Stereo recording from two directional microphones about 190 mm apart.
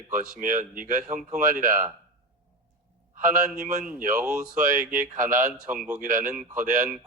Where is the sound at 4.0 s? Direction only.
45° right (ahead or behind).